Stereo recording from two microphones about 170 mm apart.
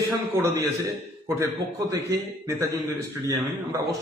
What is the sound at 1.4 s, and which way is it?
Speech, 20° right (ahead or behind).